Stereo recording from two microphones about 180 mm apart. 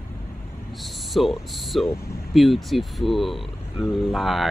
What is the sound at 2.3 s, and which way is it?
Speech, centre (ahead or behind).